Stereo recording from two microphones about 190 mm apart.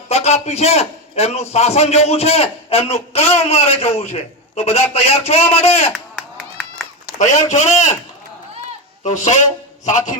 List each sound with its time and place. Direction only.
0.1 s a man's voice: 35° left (ahead or behind)
5.9 s a sound: 5° left (ahead or behind)
7.2 s a man's voice: 40° left (ahead or behind)
9.0 s a man's voice: 40° left (ahead or behind)